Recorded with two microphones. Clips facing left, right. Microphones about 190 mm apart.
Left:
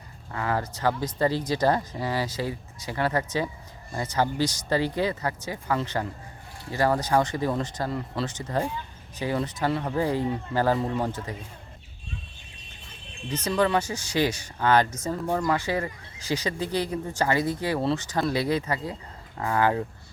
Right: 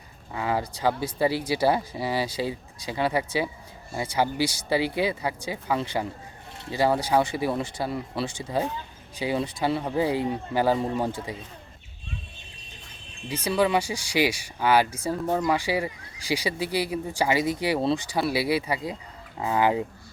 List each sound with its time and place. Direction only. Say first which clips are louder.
0.3 s speech: right 1 dB; 15° right (ahead or behind)
13.2 s speech: right 1 dB; 10° right (ahead or behind)